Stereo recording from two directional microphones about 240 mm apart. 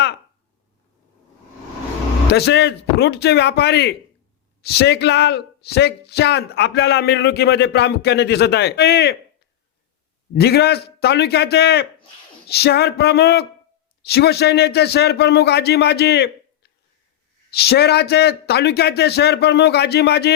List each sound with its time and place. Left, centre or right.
2.3 s speech: left
10.3 s speech: left
17.5 s speech: left